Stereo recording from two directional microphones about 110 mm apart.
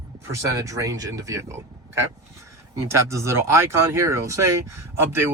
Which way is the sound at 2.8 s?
25° right (ahead or behind).